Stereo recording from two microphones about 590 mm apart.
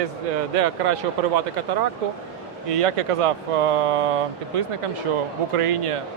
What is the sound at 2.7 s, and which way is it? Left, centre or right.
Speech, right.